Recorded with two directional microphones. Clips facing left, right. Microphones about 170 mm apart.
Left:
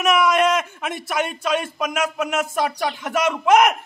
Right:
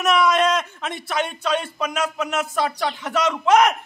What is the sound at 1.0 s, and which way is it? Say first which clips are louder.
Speech: even; 10° left (ahead or behind).